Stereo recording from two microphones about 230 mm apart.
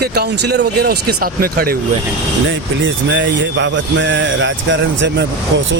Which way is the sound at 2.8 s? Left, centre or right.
Right.